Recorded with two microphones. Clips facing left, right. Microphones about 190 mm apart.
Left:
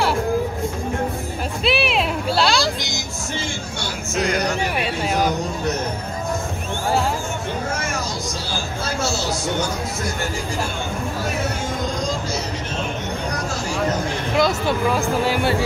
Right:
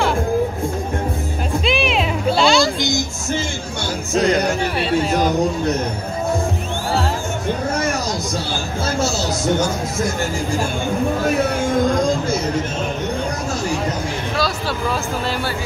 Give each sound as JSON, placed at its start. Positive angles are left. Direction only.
{"t": 1.6, "sound": "music", "side_deg": 5}
{"t": 4.1, "sound": "speech", "side_deg": -35}
{"t": 14.3, "sound": "speech", "side_deg": 15}